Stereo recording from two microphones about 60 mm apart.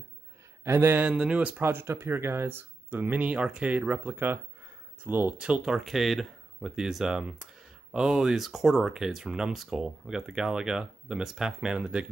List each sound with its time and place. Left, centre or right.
0.7 s speech: right
0.9 s speech: centre
1.5 s speech: right
5.4 s speech: centre
5.8 s speech: centre